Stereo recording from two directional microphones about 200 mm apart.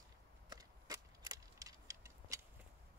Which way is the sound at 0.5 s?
20° right (ahead or behind).